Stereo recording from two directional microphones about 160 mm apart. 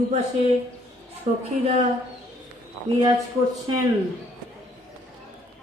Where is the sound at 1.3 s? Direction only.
40° right (ahead or behind).